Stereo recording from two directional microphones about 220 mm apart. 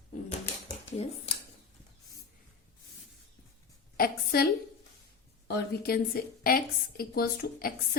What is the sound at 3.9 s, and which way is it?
Speech, 45° left (ahead or behind).